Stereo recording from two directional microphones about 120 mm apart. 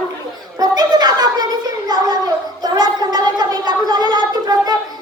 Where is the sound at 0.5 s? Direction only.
35° right (ahead or behind).